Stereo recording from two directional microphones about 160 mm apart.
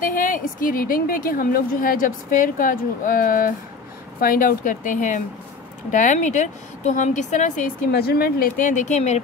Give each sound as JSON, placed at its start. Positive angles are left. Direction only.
{"t": 0.0, "sound": "a woman's voice", "side_deg": 60}
{"t": 7.9, "sound": "a woman's voice", "side_deg": 75}